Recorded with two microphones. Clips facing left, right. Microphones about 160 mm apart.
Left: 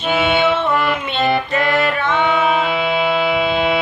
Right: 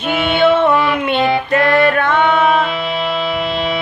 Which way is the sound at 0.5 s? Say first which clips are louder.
Right 5 dB; 55° right (ahead or behind).